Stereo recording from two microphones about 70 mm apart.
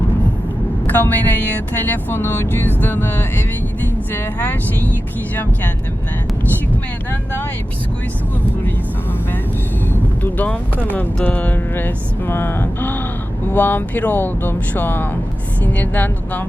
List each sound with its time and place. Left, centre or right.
0.9 s speech: left
9.9 s speech: left